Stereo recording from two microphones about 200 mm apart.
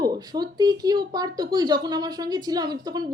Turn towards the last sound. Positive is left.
turn(degrees=-20)  # may be behind; listen again after turning